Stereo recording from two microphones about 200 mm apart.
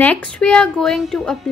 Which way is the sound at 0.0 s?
5° left (ahead or behind).